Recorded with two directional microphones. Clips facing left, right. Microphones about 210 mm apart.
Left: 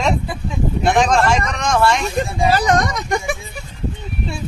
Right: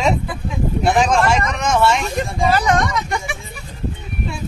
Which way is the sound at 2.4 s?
35° left (ahead or behind).